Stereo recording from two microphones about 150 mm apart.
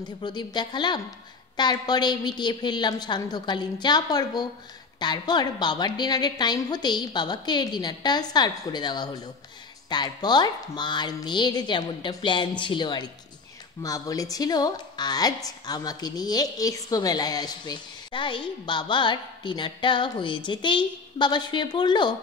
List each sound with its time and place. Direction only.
0.0 s a woman's voice: 30° left (ahead or behind)